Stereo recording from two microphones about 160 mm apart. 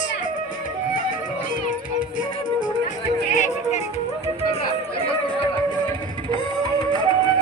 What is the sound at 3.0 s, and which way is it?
Music, 50° left (ahead or behind).